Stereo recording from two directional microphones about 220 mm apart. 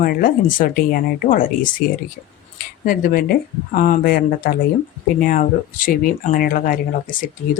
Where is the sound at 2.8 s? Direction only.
40° left (ahead or behind).